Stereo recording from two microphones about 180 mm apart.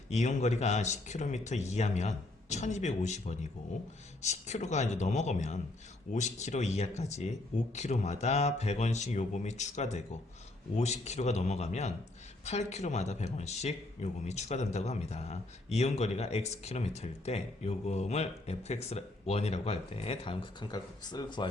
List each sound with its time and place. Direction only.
0.1 s speech: 40° left (ahead or behind); by 21.4 s 25° left (ahead or behind)